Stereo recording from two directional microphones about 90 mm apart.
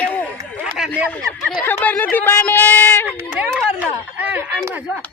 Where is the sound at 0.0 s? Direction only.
20° left (ahead or behind).